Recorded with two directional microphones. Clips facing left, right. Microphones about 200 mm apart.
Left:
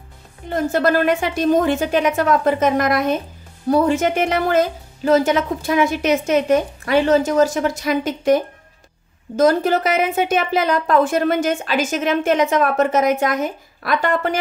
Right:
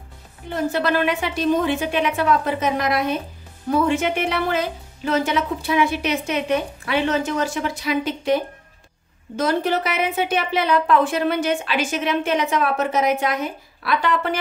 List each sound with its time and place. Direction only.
0.5 s a woman's voice: 45° left (ahead or behind)
9.4 s a woman's voice: 45° left (ahead or behind)